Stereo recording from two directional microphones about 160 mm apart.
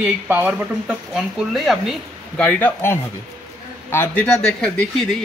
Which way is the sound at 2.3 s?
10° left (ahead or behind).